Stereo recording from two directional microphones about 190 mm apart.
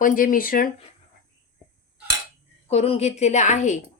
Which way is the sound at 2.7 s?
35° left (ahead or behind).